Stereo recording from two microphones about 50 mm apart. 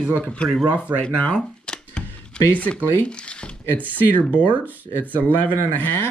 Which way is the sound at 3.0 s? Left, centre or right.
Left.